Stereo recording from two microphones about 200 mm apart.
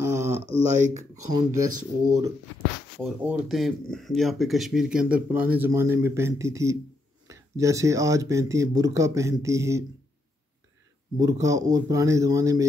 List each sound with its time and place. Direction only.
0.0 s a sound: 15° right (ahead or behind)
0.5 s speech: 35° right (ahead or behind)
1.3 s speech: 20° right (ahead or behind)
3.0 s speech: 5° right (ahead or behind)
11.1 s speech: 15° right (ahead or behind)